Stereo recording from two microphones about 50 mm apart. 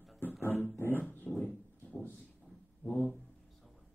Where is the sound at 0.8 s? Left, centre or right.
Left.